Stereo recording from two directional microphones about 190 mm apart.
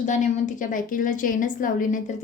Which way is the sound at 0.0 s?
40° left (ahead or behind).